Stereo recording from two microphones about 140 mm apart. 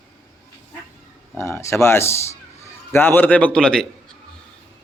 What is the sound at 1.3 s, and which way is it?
A man's voice, 20° left (ahead or behind).